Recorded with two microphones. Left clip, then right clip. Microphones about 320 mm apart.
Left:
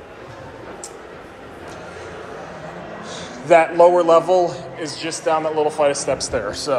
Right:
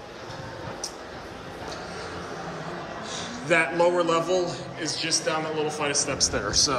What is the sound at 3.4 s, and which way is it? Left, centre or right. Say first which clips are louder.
A man's voice: left 10 dB; centre.